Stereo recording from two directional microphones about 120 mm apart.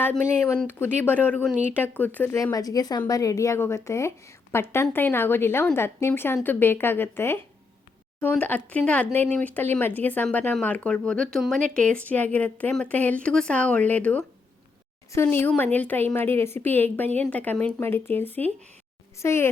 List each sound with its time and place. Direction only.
0.0 s a woman's voice: 20° left (ahead or behind)